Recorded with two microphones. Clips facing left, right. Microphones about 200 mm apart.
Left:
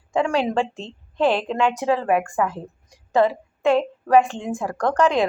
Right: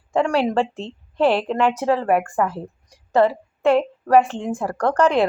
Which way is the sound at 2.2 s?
15° left (ahead or behind).